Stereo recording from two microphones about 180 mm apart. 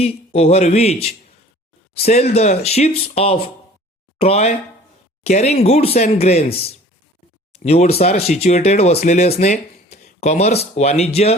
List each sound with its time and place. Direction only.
0.3 s speech: 35° left (ahead or behind)